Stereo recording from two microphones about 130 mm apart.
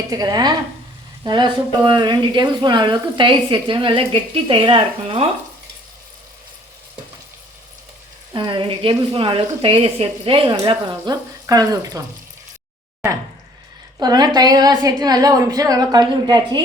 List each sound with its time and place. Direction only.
0.1 s speech: 30° right (ahead or behind)
8.3 s speech: 35° right (ahead or behind)
10.6 s a woman's voice: 30° right (ahead or behind)
14.0 s a woman's voice: 30° right (ahead or behind)